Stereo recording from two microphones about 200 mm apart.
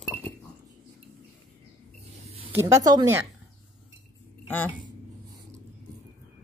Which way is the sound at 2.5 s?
15° right (ahead or behind).